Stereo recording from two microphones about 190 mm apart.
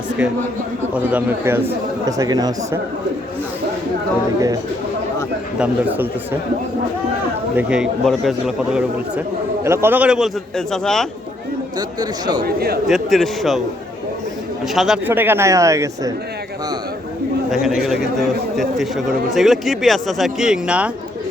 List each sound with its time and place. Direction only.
1.1 s a man's voice: 10° right (ahead or behind)
5.5 s a man's voice: 5° right (ahead or behind)
7.5 s a man's voice: 5° right (ahead or behind)
11.8 s speech: 20° right (ahead or behind)
12.5 s a man's voice: 55° right (ahead or behind)
12.9 s a man's voice: centre (ahead or behind)
14.8 s a man's voice: 5° right (ahead or behind)
17.5 s a man's voice: centre (ahead or behind)